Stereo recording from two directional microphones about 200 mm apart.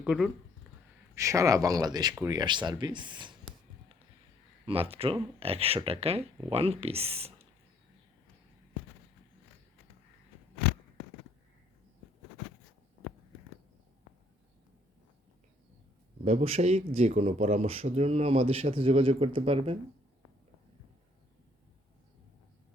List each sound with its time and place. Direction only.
0.0 s speech: 5° right (ahead or behind)
1.1 s speech: 15° right (ahead or behind)
4.6 s speech: 30° right (ahead or behind)
16.2 s speech: 30° right (ahead or behind)